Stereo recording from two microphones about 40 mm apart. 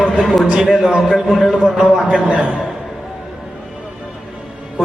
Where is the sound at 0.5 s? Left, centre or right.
Centre.